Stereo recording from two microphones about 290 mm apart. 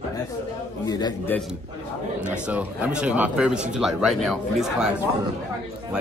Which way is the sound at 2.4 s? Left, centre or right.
Centre.